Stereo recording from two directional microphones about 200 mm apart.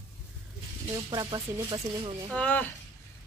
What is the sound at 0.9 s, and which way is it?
Speech, 20° right (ahead or behind).